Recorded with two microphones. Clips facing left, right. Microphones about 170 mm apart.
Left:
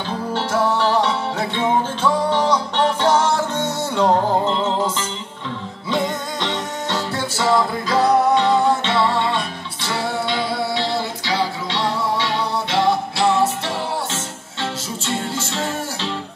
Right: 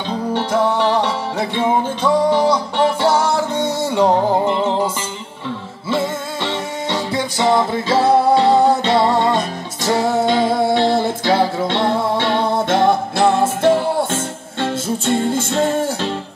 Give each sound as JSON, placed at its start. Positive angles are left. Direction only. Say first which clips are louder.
{"t": 0.3, "sound": "music", "louder": "right 3 dB", "side_deg": -15}
{"t": 5.9, "sound": "music", "louder": "right 2 dB", "side_deg": -5}